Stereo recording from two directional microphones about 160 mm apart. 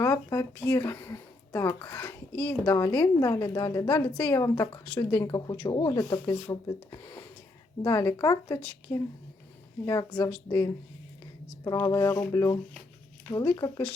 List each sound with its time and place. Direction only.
0.0 s a woman's voice: 15° left (ahead or behind)